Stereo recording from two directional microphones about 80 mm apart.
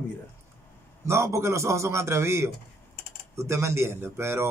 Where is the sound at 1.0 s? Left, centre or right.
Right.